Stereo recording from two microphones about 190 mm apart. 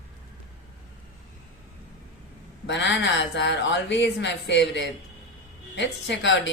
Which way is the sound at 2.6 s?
70° left (ahead or behind).